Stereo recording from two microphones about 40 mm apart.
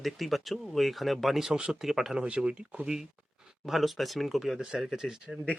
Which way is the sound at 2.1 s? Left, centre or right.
Right.